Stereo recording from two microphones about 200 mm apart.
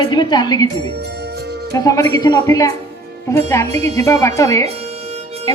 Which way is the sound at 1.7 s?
15° left (ahead or behind).